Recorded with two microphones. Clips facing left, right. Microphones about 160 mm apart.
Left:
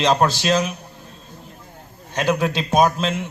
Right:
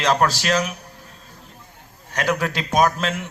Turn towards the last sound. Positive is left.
turn(degrees=20)  # may be behind; listen again after turning